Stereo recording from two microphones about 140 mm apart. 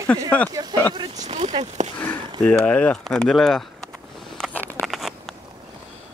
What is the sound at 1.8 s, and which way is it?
Speech, 60° right (ahead or behind).